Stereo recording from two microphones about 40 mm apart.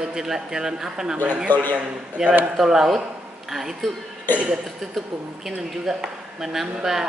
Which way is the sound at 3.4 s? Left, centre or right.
Centre.